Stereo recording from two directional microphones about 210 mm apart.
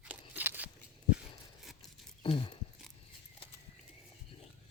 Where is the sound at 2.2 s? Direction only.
25° left (ahead or behind).